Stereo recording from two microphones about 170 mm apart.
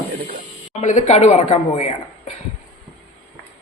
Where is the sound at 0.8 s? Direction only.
45° left (ahead or behind).